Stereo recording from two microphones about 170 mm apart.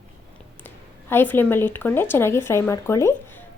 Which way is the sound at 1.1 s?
10° left (ahead or behind).